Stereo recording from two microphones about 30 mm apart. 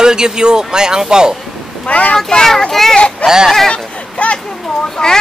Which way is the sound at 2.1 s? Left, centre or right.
Centre.